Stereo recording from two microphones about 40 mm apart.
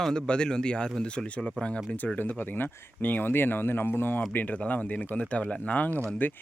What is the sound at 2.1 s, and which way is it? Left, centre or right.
Speech, left.